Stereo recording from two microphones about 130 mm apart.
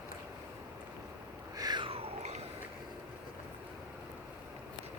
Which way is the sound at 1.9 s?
55° right (ahead or behind).